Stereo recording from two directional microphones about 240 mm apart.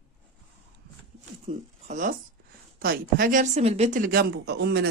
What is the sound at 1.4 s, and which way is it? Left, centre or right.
Speech, right.